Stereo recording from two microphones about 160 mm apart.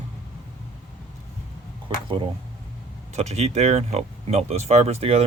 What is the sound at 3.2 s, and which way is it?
Speech, 40° right (ahead or behind).